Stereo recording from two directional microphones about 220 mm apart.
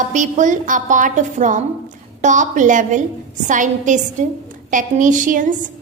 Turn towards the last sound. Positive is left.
turn(degrees=-35)  # may be behind; listen again after turning